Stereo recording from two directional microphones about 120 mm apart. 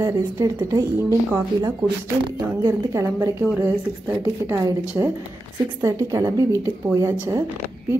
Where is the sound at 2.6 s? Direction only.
25° right (ahead or behind).